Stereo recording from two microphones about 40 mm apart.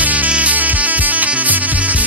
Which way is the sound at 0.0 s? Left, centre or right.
Right.